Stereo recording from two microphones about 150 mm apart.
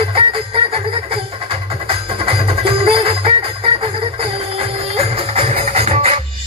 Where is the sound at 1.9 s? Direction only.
40° right (ahead or behind).